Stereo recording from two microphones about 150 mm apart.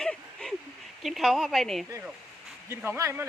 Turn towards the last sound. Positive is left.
turn(degrees=-15)  # may be behind; listen again after turning